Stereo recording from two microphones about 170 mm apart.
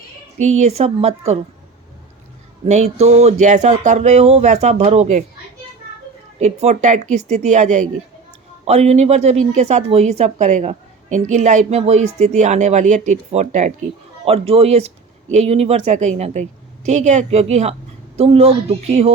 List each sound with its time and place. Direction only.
0.3 s speech: 40° right (ahead or behind)
2.6 s speech: 40° right (ahead or behind)
6.4 s a woman's voice: 40° right (ahead or behind)